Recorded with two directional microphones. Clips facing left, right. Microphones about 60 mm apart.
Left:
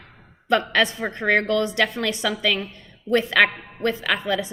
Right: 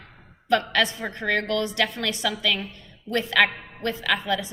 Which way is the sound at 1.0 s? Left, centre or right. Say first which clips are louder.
Left 5 dB; left.